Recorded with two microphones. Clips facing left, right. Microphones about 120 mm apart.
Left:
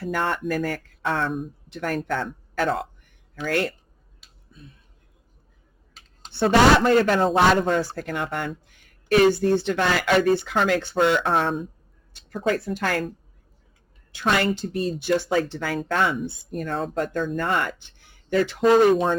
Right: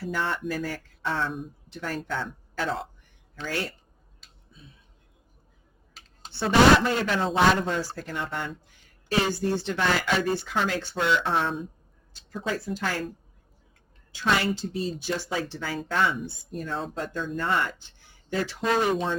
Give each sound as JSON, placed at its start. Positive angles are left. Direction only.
{"t": 0.0, "sound": "speech", "side_deg": 55}
{"t": 6.3, "sound": "speech", "side_deg": 55}
{"t": 14.1, "sound": "speech", "side_deg": 60}